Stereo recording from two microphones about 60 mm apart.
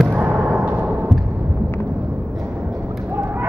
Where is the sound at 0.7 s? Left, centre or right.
Right.